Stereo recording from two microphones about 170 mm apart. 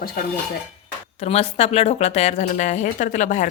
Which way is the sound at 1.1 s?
40° left (ahead or behind).